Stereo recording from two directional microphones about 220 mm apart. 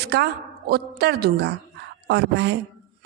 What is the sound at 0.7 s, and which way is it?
A woman's voice, 45° right (ahead or behind).